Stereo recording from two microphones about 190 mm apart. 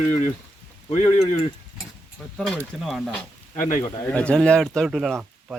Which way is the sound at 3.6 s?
45° left (ahead or behind).